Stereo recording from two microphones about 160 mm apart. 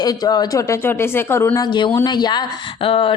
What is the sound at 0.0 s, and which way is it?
A woman's voice, 25° left (ahead or behind).